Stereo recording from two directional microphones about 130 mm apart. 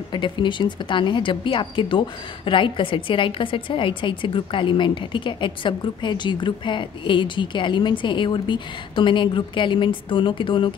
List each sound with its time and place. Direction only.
0.1 s speech: 35° left (ahead or behind)